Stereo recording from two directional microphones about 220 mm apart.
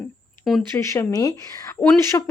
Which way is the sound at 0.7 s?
10° left (ahead or behind).